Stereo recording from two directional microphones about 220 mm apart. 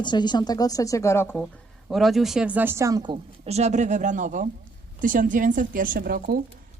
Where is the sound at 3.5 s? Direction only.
30° right (ahead or behind).